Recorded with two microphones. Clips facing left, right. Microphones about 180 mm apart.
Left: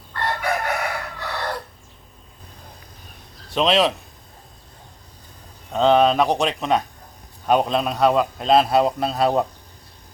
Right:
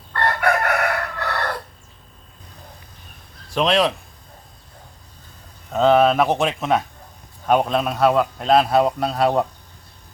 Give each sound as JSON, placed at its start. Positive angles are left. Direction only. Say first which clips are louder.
{"t": 0.1, "sound": "chicken", "louder": "right 4 dB", "side_deg": -65}
{"t": 3.6, "sound": "speech", "louder": "even", "side_deg": 0}
{"t": 5.7, "sound": "speech", "louder": "right 1 dB", "side_deg": -5}